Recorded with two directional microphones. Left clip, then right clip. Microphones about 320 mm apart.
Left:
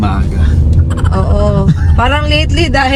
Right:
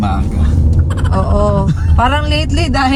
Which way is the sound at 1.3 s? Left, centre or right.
Left.